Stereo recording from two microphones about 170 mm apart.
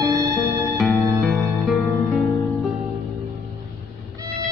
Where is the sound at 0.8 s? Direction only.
Centre (ahead or behind).